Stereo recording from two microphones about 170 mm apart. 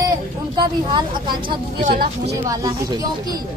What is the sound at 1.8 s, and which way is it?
Speech, 50° right (ahead or behind).